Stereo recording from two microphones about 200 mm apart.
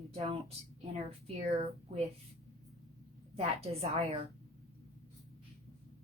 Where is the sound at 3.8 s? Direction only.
30° right (ahead or behind).